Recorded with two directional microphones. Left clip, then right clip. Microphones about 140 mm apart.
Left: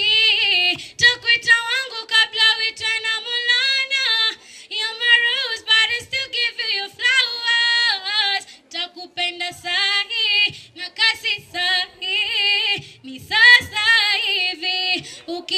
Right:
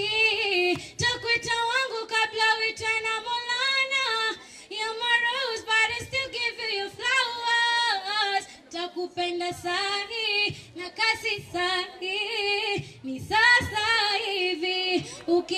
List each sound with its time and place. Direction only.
0.0 s female singing: 30° left (ahead or behind)